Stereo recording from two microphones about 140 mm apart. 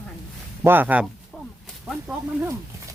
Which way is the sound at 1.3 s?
5° left (ahead or behind).